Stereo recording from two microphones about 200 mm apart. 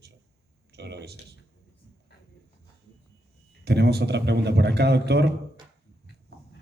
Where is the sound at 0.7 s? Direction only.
55° right (ahead or behind).